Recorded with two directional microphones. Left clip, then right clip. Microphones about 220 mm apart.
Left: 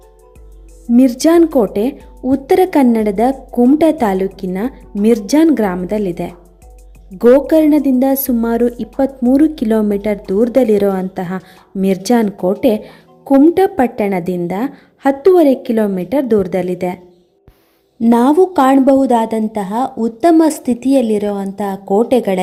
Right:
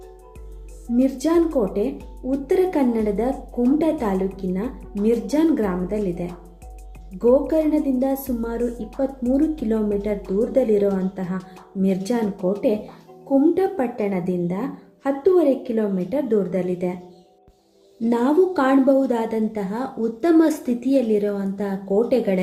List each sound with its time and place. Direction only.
0.9 s a woman's voice: 45° left (ahead or behind)
18.0 s a woman's voice: 45° left (ahead or behind)